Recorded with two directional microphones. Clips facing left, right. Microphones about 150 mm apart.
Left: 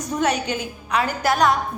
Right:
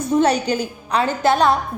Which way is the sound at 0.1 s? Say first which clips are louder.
Right 5 dB; 30° right (ahead or behind).